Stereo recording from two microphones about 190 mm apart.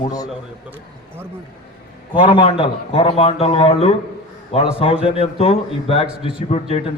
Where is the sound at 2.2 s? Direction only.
25° left (ahead or behind).